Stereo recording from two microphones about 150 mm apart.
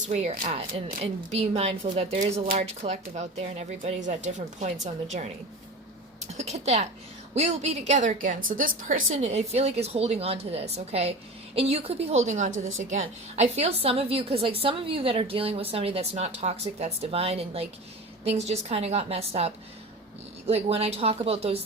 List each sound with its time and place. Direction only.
0.1 s a woman's voice: 50° right (ahead or behind)
6.3 s a woman's voice: 45° right (ahead or behind)
20.5 s a woman's voice: 45° right (ahead or behind)